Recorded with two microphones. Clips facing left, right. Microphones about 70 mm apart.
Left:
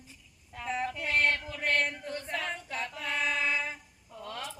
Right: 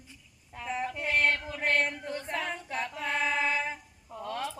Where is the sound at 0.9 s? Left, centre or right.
Centre.